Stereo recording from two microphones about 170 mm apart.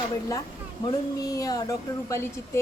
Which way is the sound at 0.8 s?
20° left (ahead or behind).